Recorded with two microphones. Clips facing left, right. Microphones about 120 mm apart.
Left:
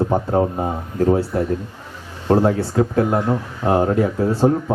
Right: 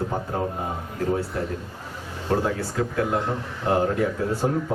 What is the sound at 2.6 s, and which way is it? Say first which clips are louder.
Speech: left 7 dB; 35° left (ahead or behind).